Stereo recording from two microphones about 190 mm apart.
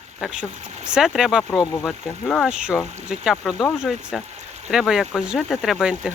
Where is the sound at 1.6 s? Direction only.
15° left (ahead or behind).